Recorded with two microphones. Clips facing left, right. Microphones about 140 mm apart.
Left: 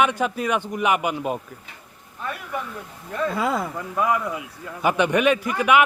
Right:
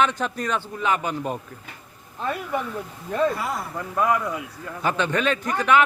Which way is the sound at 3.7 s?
10° left (ahead or behind).